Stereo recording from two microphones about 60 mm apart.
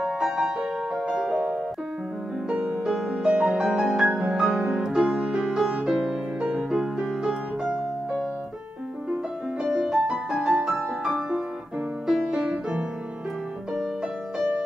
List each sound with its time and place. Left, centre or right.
0.0 s music: centre
2.8 s music: centre
11.1 s music: centre